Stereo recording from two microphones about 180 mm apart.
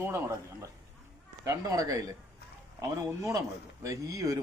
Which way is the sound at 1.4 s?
20° right (ahead or behind).